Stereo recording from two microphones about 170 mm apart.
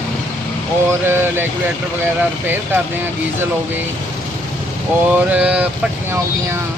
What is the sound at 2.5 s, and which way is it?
Speech, 10° right (ahead or behind).